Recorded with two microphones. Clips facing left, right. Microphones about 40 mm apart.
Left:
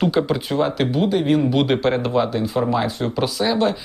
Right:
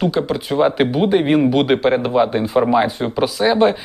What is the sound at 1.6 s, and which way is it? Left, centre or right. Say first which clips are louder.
Speech: right 3 dB; centre.